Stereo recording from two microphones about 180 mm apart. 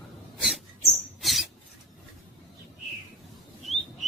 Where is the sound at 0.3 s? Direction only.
Centre (ahead or behind).